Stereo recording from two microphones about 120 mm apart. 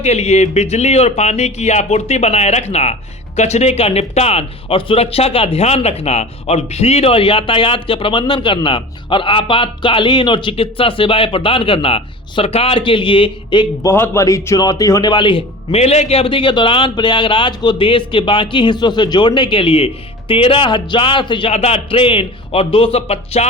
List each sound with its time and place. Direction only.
0.0 s a man's voice: 65° left (ahead or behind); by 13.7 s 45° left (ahead or behind)
13.8 s a man's voice: 20° left (ahead or behind)
15.1 s a man's voice: 45° left (ahead or behind)
21.5 s speech: 55° left (ahead or behind)